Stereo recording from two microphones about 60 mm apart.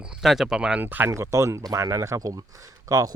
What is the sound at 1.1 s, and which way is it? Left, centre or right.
Speech, right.